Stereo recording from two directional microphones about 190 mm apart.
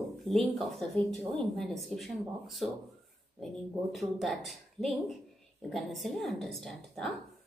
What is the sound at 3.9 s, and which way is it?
Speech, centre (ahead or behind).